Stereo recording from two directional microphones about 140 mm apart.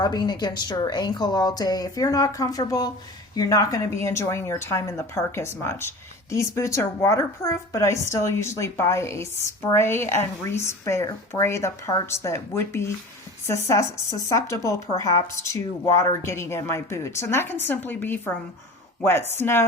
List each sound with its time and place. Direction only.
0.0 s a woman's voice: 30° left (ahead or behind)